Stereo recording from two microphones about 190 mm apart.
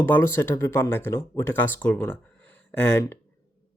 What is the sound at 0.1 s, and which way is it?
Speech, 15° left (ahead or behind).